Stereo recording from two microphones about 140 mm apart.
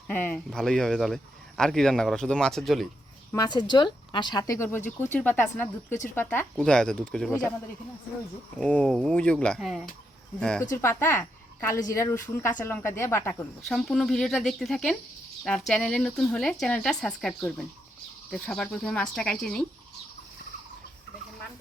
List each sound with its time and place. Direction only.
0.1 s speech: 15° left (ahead or behind)
3.3 s speech: 30° left (ahead or behind); by 7.5 s 10° left (ahead or behind)
8.5 s speech: 10° left (ahead or behind)
10.6 s speech: 20° left (ahead or behind)
13.7 s speech: 5° left (ahead or behind)